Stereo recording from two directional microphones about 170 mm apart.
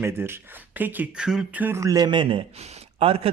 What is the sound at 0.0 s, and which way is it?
Speech, 15° right (ahead or behind).